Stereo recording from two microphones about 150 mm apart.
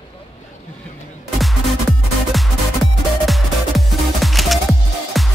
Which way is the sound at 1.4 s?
Centre (ahead or behind).